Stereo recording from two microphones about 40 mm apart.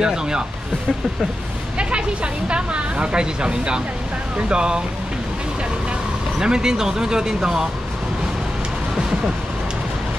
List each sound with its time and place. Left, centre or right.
0.0 s speech: centre
1.8 s a sound: right
2.5 s speech: right
6.4 s speech: centre